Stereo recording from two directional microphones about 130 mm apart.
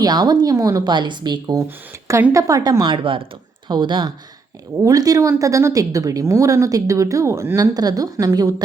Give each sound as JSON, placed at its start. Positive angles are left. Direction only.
{"t": 0.0, "sound": "a woman's voice", "side_deg": -30}
{"t": 2.0, "sound": "a woman's voice", "side_deg": -20}